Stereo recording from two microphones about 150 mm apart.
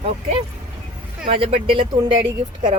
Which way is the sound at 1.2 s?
40° right (ahead or behind).